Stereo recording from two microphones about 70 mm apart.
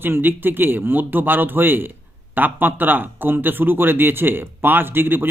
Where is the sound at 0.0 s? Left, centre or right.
Right.